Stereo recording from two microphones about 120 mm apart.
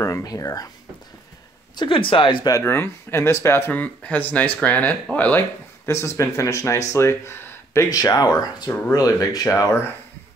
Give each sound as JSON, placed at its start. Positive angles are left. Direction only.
{"t": 0.0, "sound": "speech", "side_deg": 30}
{"t": 1.8, "sound": "speech", "side_deg": 45}
{"t": 5.9, "sound": "speech", "side_deg": 25}